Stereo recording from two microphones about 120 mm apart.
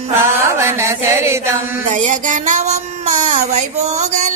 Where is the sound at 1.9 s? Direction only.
90° right; by 4.1 s 70° right (ahead or behind).